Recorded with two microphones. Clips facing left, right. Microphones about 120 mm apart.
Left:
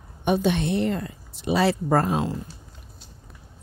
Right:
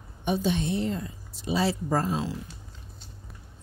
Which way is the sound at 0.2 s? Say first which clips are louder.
Left 4 dB; 65° left (ahead or behind).